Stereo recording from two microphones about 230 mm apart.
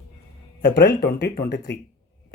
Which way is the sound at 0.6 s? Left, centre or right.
Left.